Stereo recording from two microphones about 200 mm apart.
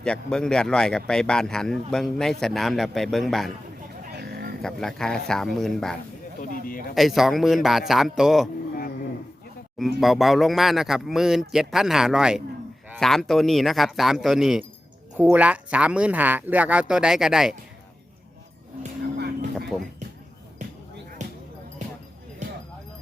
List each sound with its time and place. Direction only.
0.0 s speech: 5° left (ahead or behind)
4.1 s livestock: 50° right (ahead or behind)
4.6 s speech: centre (ahead or behind)
6.4 s a sound: 45° left (ahead or behind)
6.9 s speech: centre (ahead or behind)
9.7 s speech: centre (ahead or behind)
20.6 s basketball bounce: 35° right (ahead or behind)